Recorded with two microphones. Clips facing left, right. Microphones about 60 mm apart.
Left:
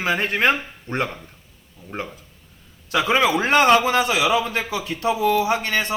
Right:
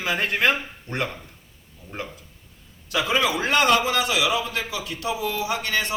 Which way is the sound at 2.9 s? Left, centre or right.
Left.